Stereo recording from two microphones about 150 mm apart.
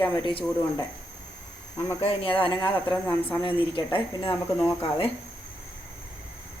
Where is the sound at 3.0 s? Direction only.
10° left (ahead or behind).